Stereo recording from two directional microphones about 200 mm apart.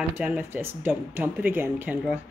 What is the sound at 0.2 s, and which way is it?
Speech, 10° right (ahead or behind).